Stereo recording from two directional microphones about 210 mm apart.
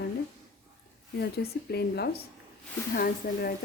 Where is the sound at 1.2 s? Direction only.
50° left (ahead or behind).